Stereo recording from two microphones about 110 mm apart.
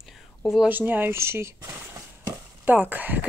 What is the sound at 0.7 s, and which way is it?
Speech, 15° right (ahead or behind).